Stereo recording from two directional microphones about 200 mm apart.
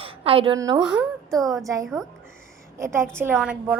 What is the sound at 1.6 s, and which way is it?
A woman's voice, 15° right (ahead or behind).